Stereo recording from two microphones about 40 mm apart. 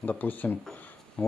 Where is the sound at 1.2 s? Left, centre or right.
Left.